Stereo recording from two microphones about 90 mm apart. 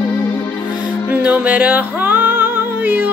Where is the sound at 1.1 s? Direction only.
15° right (ahead or behind).